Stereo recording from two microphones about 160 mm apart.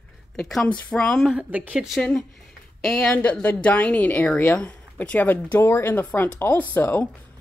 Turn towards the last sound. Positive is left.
turn(degrees=10)  # may be behind; listen again after turning